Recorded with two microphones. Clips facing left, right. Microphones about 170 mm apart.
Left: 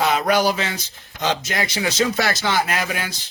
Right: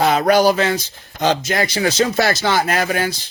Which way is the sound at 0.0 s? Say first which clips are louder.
Right 5 dB; 45° right (ahead or behind).